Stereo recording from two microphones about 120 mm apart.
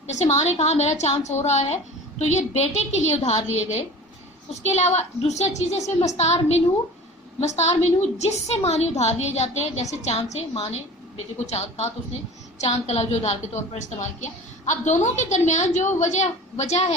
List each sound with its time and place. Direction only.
0.1 s a woman's voice: 70° left (ahead or behind)
10.5 s a woman's voice: 60° left (ahead or behind)
13.7 s a woman's voice: 85° left; by 16.9 s 70° left (ahead or behind)